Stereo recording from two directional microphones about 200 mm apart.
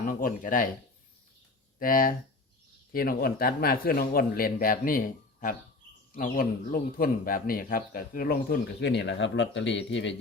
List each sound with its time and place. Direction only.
0.1 s speech: 40° left (ahead or behind)
1.8 s speech: 45° left (ahead or behind); by 10.2 s 65° left (ahead or behind)